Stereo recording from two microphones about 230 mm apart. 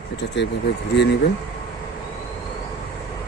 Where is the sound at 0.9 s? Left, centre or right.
Left.